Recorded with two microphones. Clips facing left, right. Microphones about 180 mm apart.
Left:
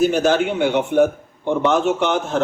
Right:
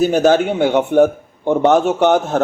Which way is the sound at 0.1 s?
45° right (ahead or behind).